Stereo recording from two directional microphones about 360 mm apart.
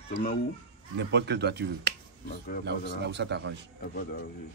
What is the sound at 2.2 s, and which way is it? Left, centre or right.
Speech, left.